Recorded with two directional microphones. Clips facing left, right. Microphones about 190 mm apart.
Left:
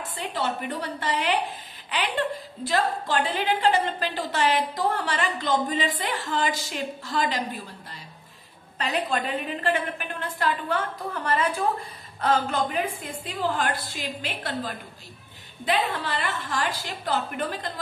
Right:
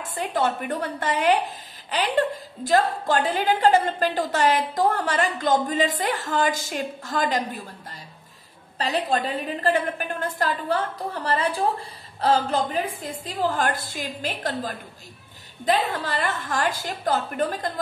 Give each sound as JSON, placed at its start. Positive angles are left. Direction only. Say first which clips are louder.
{"t": 0.1, "sound": "a woman's voice", "louder": "right 5 dB", "side_deg": -50}
{"t": 8.7, "sound": "a woman's voice", "louder": "right 3 dB", "side_deg": -35}
{"t": 11.2, "sound": "a woman's voice", "louder": "right 1 dB", "side_deg": -30}